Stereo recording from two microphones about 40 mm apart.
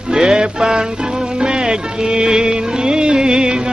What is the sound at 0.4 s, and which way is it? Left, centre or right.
Music, centre.